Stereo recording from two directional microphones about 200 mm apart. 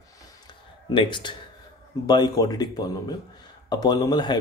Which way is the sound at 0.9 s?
25° left (ahead or behind).